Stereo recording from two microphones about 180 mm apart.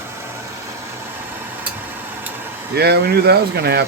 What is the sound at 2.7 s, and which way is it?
Speech, 65° right (ahead or behind).